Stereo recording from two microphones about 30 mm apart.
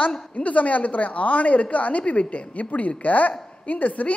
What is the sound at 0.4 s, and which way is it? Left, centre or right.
A woman's voice, left.